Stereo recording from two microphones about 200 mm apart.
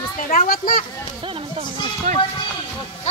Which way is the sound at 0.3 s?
45° left (ahead or behind).